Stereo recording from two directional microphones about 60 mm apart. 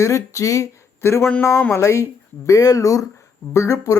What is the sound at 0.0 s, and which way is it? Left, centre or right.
Speech, left.